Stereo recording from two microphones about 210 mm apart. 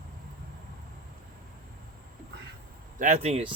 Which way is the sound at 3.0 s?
35° right (ahead or behind).